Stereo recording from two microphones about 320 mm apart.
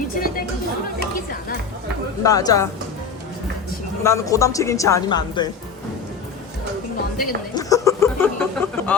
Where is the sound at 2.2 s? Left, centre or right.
Centre.